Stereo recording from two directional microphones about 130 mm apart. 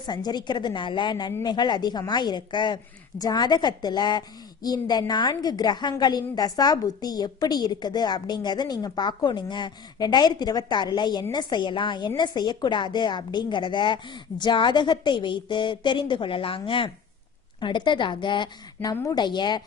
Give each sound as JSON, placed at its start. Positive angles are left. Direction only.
{"t": 0.0, "sound": "a woman's voice", "side_deg": 35}